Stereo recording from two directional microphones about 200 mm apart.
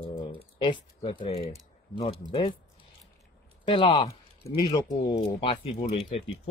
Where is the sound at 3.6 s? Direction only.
25° left (ahead or behind).